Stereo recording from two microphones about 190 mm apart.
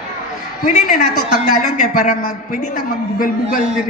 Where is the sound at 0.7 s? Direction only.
40° left (ahead or behind).